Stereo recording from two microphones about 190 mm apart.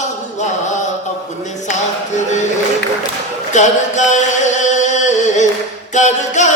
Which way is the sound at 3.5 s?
40° left (ahead or behind).